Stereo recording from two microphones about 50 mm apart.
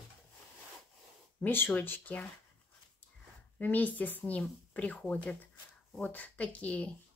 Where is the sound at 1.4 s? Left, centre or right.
Left.